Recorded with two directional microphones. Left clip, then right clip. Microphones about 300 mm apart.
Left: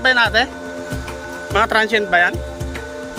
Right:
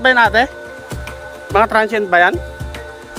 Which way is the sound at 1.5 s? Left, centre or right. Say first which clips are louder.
Right 2 dB; centre.